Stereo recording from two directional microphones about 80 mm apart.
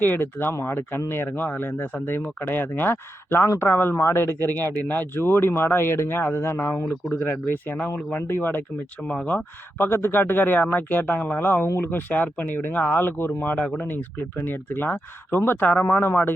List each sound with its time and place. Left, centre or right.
0.0 s speech: left